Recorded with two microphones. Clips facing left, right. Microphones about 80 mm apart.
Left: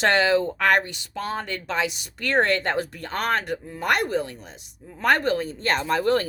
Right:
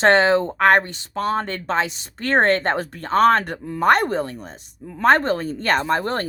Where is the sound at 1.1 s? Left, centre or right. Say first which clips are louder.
Right 7 dB; right.